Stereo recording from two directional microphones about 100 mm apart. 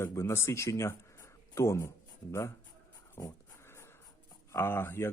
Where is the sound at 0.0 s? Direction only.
25° left (ahead or behind).